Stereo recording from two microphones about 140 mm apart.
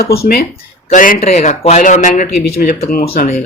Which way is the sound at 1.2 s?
60° left (ahead or behind).